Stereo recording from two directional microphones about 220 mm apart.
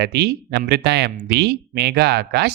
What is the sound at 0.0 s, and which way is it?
Speech, 50° right (ahead or behind).